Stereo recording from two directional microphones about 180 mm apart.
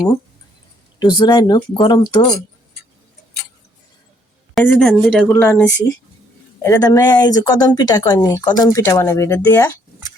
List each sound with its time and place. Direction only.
0.9 s speech: 25° left (ahead or behind)
4.5 s a woman's voice: 5° left (ahead or behind)
6.6 s speech: 20° left (ahead or behind)